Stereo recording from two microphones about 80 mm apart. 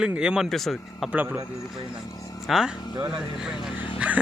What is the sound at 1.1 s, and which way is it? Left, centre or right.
Speech, centre.